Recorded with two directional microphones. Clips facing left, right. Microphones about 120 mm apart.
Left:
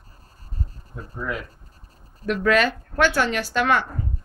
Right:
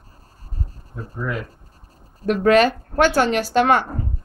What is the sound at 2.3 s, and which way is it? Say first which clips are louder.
A woman's voice: right 5 dB; 35° right (ahead or behind).